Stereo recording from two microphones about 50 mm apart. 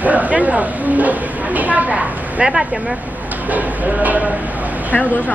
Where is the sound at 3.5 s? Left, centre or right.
Right.